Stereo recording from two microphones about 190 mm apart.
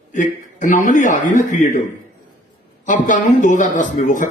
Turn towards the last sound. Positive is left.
turn(degrees=40)  # may be behind; listen again after turning